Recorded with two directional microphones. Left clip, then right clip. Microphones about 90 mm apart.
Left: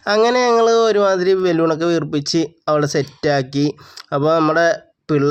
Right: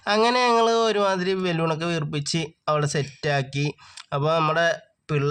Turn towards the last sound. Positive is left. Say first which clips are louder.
# left 9 dB
turn(degrees=40)  # may be behind; listen again after turning